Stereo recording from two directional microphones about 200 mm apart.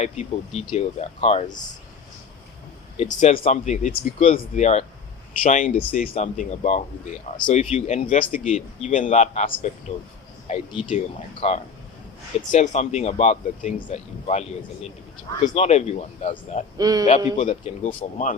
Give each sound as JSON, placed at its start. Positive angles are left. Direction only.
{"t": 0.0, "sound": "speech", "side_deg": 30}
{"t": 3.2, "sound": "speech", "side_deg": 30}
{"t": 15.4, "sound": "speech", "side_deg": 35}
{"t": 16.7, "sound": "speech", "side_deg": -20}
{"t": 17.3, "sound": "speech", "side_deg": 35}